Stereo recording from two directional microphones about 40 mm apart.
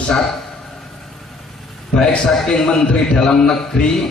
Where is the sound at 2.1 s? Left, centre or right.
Centre.